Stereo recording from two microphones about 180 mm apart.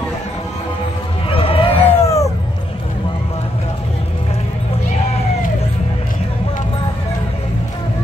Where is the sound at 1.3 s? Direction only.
30° left (ahead or behind).